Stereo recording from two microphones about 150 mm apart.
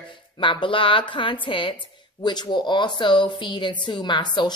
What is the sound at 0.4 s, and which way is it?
A woman's voice, 35° left (ahead or behind).